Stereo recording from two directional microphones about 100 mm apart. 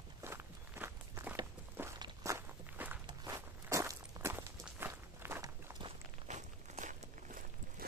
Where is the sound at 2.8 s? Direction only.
20° right (ahead or behind).